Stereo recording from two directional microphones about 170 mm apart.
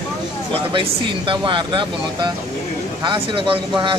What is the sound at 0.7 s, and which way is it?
Speech, 30° right (ahead or behind).